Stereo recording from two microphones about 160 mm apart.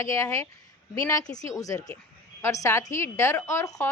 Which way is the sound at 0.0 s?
20° left (ahead or behind).